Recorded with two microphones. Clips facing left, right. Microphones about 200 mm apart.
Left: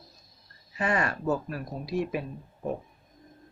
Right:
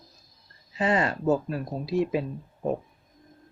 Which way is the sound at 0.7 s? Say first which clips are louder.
Right 3 dB; 20° right (ahead or behind).